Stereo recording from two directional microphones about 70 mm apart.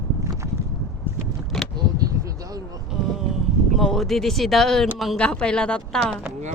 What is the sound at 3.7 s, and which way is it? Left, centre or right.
Speech, centre.